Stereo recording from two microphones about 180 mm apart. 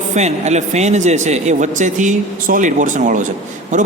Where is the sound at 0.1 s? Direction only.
40° right (ahead or behind).